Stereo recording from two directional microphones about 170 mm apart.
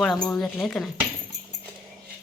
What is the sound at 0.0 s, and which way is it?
Speech, 5° left (ahead or behind).